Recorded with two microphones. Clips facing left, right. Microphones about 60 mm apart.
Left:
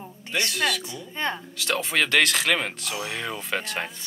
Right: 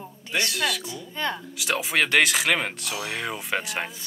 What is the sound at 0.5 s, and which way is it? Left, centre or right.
Speech, centre.